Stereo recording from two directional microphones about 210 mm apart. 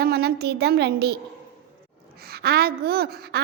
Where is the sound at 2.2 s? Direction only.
50° right (ahead or behind).